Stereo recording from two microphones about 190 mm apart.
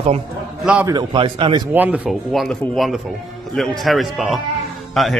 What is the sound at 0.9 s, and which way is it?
Speech, 25° right (ahead or behind).